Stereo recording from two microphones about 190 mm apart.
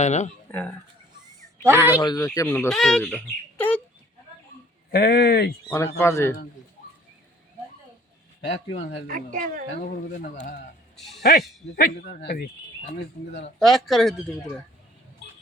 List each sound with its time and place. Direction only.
0.0 s speech: 35° left (ahead or behind)
1.6 s speech: 10° right (ahead or behind)
2.0 s speech: 20° left (ahead or behind)
2.6 s speech: centre (ahead or behind)
4.9 s speech: 55° left (ahead or behind)
6.0 s speech: 15° left (ahead or behind)
9.0 s a woman's voice: 45° right (ahead or behind)
9.8 s speech: 45° left (ahead or behind)
10.9 s a sound: centre (ahead or behind)
11.2 s speech: 60° left (ahead or behind)
13.6 s speech: centre (ahead or behind)